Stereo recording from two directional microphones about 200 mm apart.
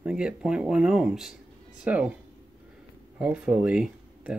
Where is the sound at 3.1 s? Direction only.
5° right (ahead or behind).